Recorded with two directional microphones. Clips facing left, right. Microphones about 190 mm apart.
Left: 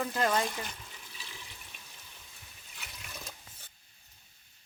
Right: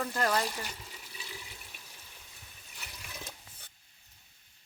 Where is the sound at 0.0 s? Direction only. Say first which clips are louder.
Left 1 dB; 10° left (ahead or behind).